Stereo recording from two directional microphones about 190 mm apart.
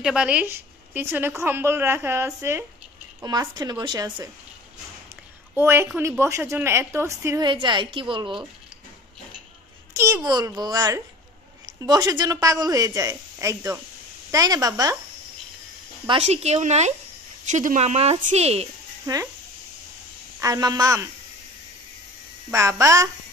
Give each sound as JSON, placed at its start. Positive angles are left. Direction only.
{"t": 0.0, "sound": "a woman's voice", "side_deg": -5}
{"t": 5.6, "sound": "a woman's voice", "side_deg": -15}
{"t": 9.9, "sound": "a woman's voice", "side_deg": -15}
{"t": 16.1, "sound": "a woman's voice", "side_deg": -35}
{"t": 19.1, "sound": "a woman's voice", "side_deg": -20}
{"t": 20.3, "sound": "a woman's voice", "side_deg": -20}
{"t": 22.5, "sound": "a woman's voice", "side_deg": -15}